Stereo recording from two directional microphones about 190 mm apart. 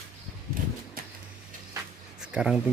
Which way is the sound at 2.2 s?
5° right (ahead or behind).